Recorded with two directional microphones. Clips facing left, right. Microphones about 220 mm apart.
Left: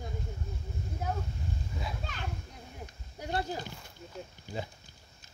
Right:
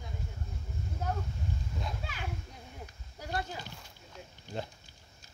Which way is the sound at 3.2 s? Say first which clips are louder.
Left 3 dB; 25° left (ahead or behind).